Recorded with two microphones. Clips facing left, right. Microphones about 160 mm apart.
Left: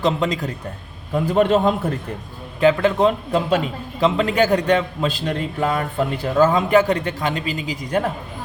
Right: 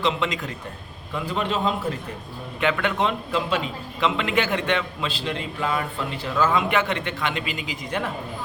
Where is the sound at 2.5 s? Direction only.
35° left (ahead or behind).